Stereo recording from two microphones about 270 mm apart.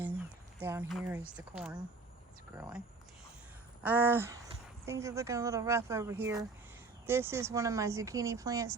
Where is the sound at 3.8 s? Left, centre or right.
Centre.